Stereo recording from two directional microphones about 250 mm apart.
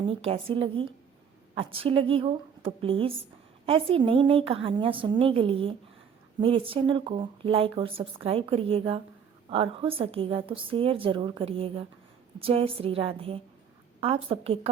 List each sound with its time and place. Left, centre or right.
0.0 s speech: right